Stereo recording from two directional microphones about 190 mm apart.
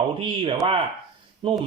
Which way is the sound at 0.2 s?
30° right (ahead or behind).